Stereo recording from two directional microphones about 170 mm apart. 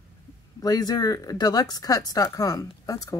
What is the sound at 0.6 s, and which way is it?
Speech, 25° left (ahead or behind).